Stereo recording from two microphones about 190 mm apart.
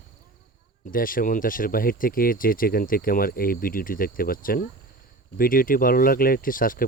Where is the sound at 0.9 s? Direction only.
45° left (ahead or behind).